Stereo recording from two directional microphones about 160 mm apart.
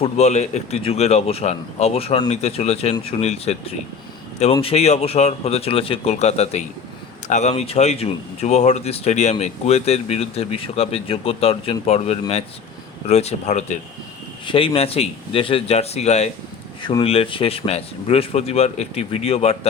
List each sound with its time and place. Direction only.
0.0 s speech: 45° left (ahead or behind)
14.4 s speech: 35° left (ahead or behind)
16.8 s speech: 35° left (ahead or behind)